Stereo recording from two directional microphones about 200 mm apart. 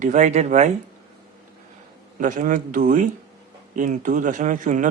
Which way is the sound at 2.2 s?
40° right (ahead or behind).